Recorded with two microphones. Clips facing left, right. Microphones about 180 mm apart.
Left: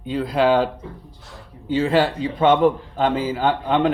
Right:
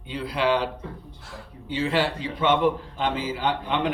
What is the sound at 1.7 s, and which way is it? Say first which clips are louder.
A man's voice: left 6 dB; 45° left (ahead or behind).